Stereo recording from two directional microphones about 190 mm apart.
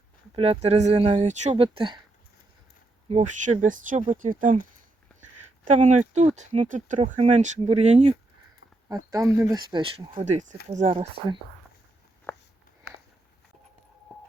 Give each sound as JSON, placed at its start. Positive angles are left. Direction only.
{"t": 0.3, "sound": "speech", "side_deg": -30}
{"t": 3.1, "sound": "speech", "side_deg": -40}
{"t": 5.7, "sound": "speech", "side_deg": -40}
{"t": 8.9, "sound": "speech", "side_deg": -15}
{"t": 12.3, "sound": "a sound", "side_deg": 10}